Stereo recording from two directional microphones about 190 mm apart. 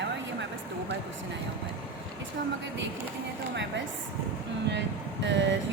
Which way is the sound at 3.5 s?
70° right (ahead or behind).